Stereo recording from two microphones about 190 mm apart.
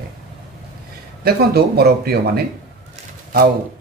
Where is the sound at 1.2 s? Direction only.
55° right (ahead or behind).